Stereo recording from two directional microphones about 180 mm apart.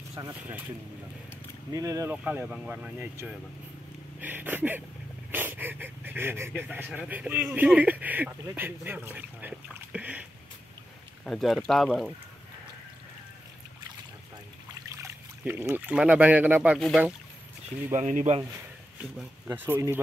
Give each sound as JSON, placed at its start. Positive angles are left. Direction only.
{"t": 0.1, "sound": "speech", "side_deg": -20}
{"t": 1.7, "sound": "speech", "side_deg": -20}
{"t": 2.2, "sound": "speech", "side_deg": -5}
{"t": 11.2, "sound": "speech", "side_deg": 0}
{"t": 14.7, "sound": "speech", "side_deg": -20}
{"t": 17.9, "sound": "speech", "side_deg": -40}
{"t": 19.1, "sound": "speech", "side_deg": -10}